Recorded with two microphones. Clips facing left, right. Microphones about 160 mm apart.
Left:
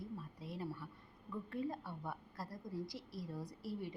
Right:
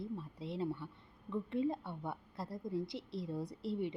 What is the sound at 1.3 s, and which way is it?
A woman's voice, 20° right (ahead or behind).